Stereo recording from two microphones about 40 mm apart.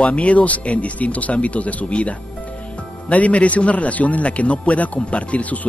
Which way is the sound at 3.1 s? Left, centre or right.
Left.